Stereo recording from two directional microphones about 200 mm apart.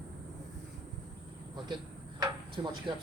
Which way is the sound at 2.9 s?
25° right (ahead or behind).